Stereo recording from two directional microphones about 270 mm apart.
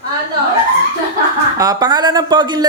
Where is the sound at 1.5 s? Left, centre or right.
Centre.